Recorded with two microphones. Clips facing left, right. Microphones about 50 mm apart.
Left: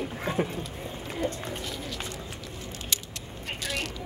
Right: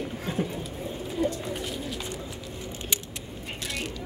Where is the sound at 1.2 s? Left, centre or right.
Left.